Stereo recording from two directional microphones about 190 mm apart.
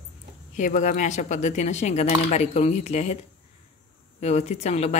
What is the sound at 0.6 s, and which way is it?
Speech, 40° left (ahead or behind).